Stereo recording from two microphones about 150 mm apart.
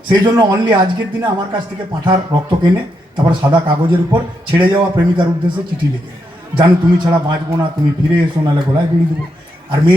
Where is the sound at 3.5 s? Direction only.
30° right (ahead or behind).